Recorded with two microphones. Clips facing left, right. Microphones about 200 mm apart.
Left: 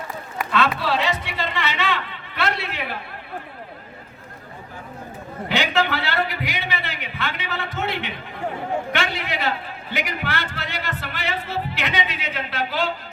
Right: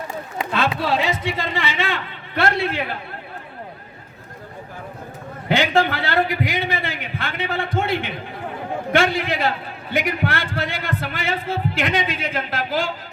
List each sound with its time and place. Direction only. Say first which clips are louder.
0.5 s speech: even; 50° right (ahead or behind)
5.5 s a man's voice: right 4 dB; 50° right (ahead or behind)